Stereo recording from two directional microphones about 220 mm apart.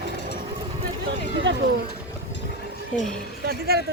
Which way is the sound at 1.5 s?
50° right (ahead or behind).